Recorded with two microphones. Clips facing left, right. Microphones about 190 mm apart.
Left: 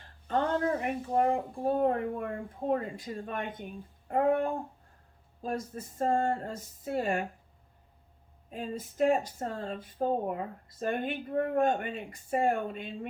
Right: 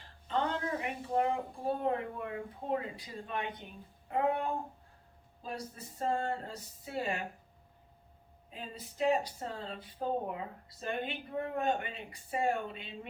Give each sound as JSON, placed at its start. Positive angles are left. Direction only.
{"t": 0.3, "sound": "speech", "side_deg": 50}
{"t": 8.4, "sound": "speech", "side_deg": 50}